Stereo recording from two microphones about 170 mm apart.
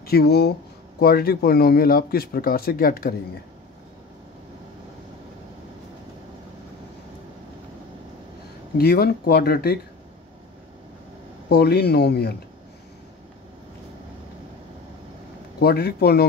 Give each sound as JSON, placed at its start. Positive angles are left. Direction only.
{"t": 0.0, "sound": "speech", "side_deg": 70}
{"t": 8.7, "sound": "speech", "side_deg": 65}
{"t": 11.4, "sound": "speech", "side_deg": 70}
{"t": 15.6, "sound": "speech", "side_deg": 65}